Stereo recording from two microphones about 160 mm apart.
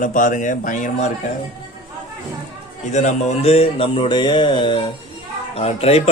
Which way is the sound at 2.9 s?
45° left (ahead or behind).